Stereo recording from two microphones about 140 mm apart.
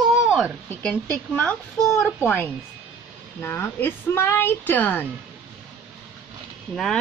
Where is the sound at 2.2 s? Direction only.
20° left (ahead or behind).